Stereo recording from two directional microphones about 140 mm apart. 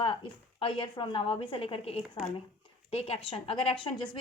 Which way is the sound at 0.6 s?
40° left (ahead or behind).